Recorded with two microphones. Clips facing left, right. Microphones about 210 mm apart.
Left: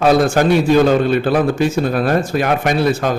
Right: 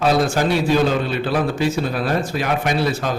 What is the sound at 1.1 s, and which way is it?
A man's voice, 50° left (ahead or behind).